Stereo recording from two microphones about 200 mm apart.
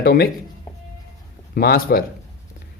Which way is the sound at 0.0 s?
50° left (ahead or behind).